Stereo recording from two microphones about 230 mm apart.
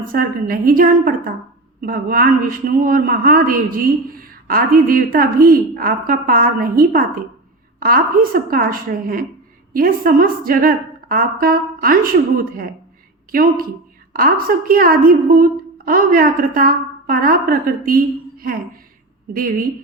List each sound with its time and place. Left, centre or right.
0.1 s a woman's voice: right